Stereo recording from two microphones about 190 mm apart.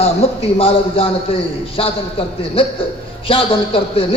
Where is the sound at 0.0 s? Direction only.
30° left (ahead or behind).